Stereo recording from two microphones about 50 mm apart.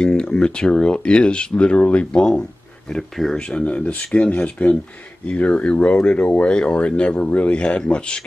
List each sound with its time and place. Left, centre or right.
0.0 s speech: centre
3.3 s speech: left